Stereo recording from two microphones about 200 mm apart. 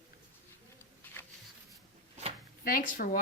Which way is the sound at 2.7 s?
45° left (ahead or behind).